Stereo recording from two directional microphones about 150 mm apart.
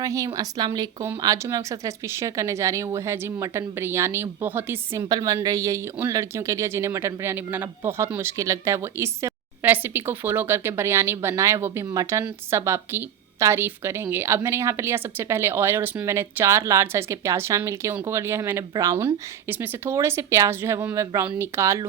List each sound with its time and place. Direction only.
0.0 s a woman's voice: 20° right (ahead or behind)
5.0 s speech: 25° right (ahead or behind)